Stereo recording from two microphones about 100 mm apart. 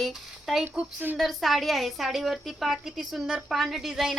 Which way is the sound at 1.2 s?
Centre (ahead or behind).